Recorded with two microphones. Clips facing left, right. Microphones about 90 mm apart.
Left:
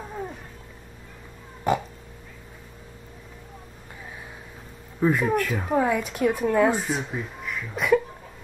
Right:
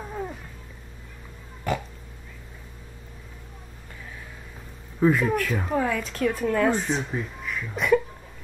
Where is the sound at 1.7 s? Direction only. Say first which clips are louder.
Left 4 dB; 20° left (ahead or behind).